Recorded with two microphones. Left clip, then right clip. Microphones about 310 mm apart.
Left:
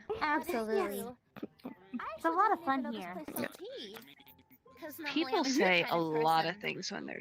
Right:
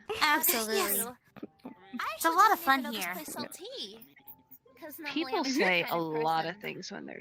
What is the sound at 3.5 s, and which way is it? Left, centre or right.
Speech, right.